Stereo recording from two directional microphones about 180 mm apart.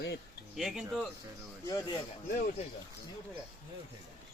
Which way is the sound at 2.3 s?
50° left (ahead or behind).